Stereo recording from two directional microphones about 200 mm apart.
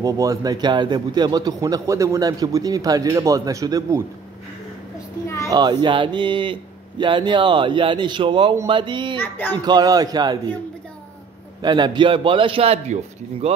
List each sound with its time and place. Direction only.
0.0 s a man's voice: 15° right (ahead or behind)
5.5 s speech: 20° right (ahead or behind)
9.2 s a child's voice: 10° left (ahead or behind)
9.7 s speech: 20° right (ahead or behind)
11.6 s speech: 20° right (ahead or behind)